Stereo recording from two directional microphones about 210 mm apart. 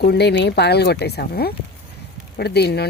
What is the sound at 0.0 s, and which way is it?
Speech, 50° left (ahead or behind).